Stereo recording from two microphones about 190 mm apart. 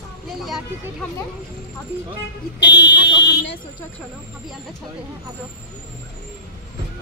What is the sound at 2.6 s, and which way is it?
Speech, 65° left (ahead or behind).